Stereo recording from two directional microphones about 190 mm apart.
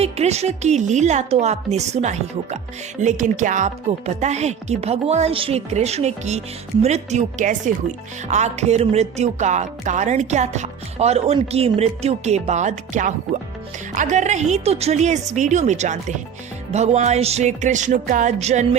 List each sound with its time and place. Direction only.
0.0 s music: 35° right (ahead or behind)